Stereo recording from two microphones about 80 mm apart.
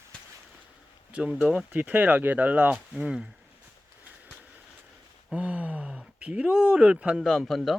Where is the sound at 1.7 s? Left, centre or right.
Right.